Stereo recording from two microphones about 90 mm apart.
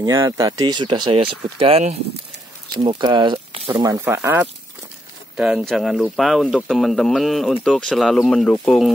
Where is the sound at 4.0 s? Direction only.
25° right (ahead or behind).